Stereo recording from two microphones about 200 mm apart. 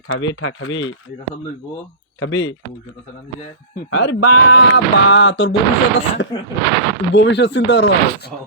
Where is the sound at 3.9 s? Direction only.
65° left (ahead or behind); by 4.6 s 85° left.